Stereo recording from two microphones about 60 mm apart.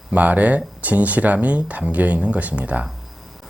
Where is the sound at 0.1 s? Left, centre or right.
Right.